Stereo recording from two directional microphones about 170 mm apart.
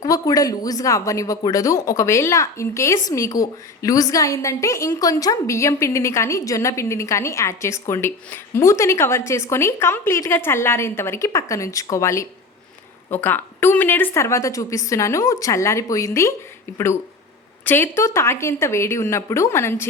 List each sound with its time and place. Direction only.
0.0 s speech: 20° left (ahead or behind)